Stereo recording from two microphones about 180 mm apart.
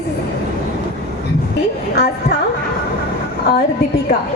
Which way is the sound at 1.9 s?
65° left (ahead or behind).